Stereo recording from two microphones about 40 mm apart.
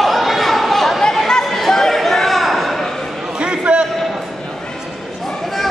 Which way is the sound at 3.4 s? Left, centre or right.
Right.